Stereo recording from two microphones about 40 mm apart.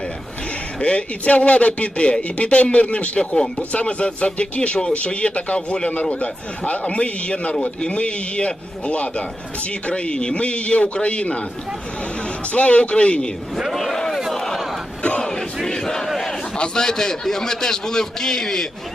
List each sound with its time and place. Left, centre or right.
0.8 s speech: left
3.2 s a man's voice: left
3.6 s a man's voice: left
12.5 s a man's voice: left
13.7 s speech: centre
14.2 s crowd: centre
15.2 s battle cry: centre
16.6 s a man's voice: centre